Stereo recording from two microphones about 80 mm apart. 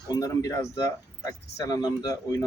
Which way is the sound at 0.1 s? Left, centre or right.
Left.